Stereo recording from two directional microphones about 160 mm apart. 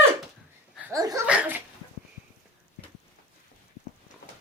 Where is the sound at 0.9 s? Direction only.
20° right (ahead or behind).